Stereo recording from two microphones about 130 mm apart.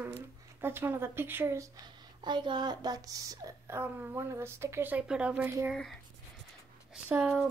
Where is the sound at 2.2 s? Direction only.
35° right (ahead or behind); by 5.5 s 10° right (ahead or behind).